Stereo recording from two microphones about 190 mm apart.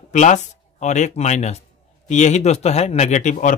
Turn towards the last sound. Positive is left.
turn(degrees=40)  # may be behind; listen again after turning